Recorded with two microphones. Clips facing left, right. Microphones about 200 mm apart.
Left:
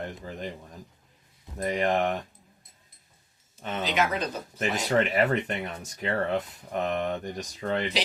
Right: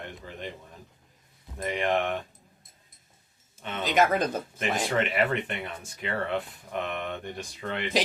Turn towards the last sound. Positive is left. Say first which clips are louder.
# left 5 dB
turn(degrees=40)  # may be behind; listen again after turning